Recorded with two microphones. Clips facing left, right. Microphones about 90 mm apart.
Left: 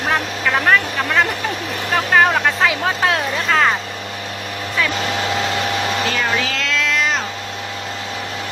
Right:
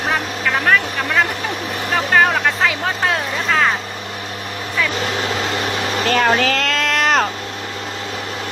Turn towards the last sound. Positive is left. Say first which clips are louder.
# right 3 dB
turn(degrees=-55)  # may be behind; listen again after turning